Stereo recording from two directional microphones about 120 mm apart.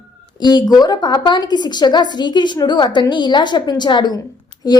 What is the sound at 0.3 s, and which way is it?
A woman's voice, 35° left (ahead or behind).